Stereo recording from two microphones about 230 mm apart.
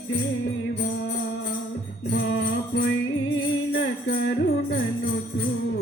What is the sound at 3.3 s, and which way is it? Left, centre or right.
Music, left.